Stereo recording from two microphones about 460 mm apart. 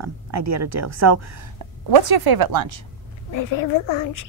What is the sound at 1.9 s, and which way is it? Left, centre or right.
Speech, right.